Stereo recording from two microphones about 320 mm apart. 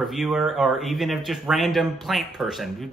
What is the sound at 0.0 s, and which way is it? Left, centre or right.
Speech, centre.